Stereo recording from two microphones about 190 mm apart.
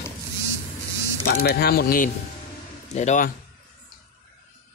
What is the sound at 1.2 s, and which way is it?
Speech, 55° left (ahead or behind).